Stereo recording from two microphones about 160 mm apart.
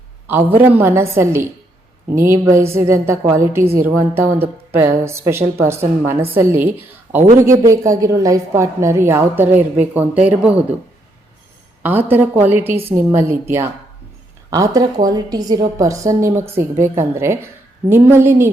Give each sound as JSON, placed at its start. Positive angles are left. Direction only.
{"t": 0.3, "sound": "a woman's voice", "side_deg": -15}
{"t": 11.8, "sound": "a woman's voice", "side_deg": -10}
{"t": 14.5, "sound": "a woman's voice", "side_deg": -20}